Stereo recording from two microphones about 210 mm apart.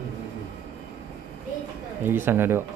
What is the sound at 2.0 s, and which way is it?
Speech, 10° right (ahead or behind).